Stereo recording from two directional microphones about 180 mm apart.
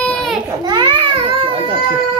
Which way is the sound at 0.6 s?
25° right (ahead or behind).